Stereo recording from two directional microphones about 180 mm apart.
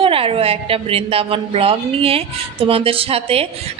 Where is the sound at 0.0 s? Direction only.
30° right (ahead or behind).